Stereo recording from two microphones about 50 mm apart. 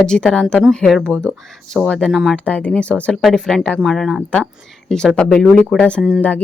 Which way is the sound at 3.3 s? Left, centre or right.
Centre.